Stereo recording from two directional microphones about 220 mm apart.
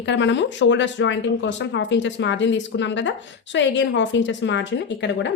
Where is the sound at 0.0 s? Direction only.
55° left (ahead or behind).